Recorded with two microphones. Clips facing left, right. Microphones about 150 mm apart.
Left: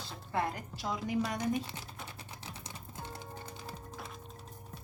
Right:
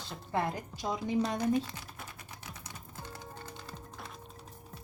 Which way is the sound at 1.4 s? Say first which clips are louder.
Right 4 dB; 20° left (ahead or behind).